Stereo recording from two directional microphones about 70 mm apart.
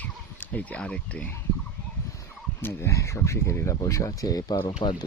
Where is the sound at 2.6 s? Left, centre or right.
Left.